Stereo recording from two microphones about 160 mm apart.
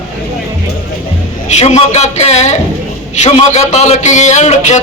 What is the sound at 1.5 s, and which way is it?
A man's voice, 45° left (ahead or behind).